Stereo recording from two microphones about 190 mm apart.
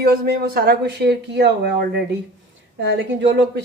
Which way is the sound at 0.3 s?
55° right (ahead or behind).